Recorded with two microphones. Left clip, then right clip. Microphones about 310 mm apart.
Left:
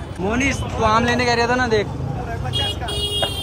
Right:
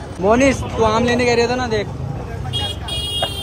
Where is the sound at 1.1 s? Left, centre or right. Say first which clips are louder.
Right 2 dB; left.